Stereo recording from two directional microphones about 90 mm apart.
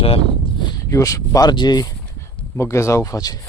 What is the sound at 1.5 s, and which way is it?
Speech, 55° left (ahead or behind).